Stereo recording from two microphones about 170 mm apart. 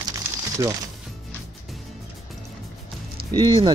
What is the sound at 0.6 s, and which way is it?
Speech, 20° right (ahead or behind).